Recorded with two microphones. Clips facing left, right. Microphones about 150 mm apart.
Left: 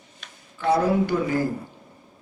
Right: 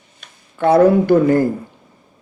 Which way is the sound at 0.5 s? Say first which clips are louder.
Right 9 dB; 60° right (ahead or behind).